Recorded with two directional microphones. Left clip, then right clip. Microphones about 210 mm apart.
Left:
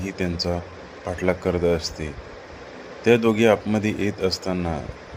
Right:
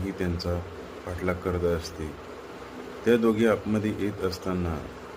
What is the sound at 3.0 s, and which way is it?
Speech, 25° left (ahead or behind).